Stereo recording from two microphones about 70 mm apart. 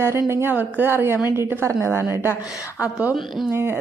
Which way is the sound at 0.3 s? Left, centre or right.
Right.